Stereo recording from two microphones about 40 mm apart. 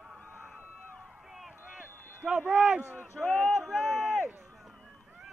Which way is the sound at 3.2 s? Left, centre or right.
Left.